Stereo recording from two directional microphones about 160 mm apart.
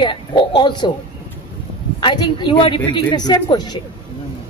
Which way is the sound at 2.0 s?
30° left (ahead or behind).